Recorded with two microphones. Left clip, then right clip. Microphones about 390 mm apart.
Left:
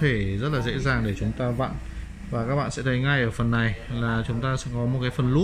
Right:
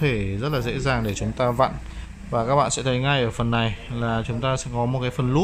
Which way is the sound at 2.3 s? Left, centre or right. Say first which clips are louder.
Right 7 dB; right.